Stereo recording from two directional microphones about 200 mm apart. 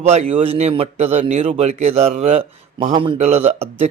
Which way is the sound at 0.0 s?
30° right (ahead or behind).